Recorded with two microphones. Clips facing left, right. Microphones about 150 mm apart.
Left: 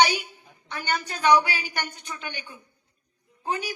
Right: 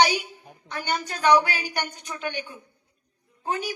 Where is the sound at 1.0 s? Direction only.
40° right (ahead or behind).